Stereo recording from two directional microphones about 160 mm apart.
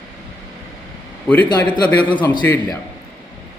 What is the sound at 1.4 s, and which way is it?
Speech, 30° left (ahead or behind).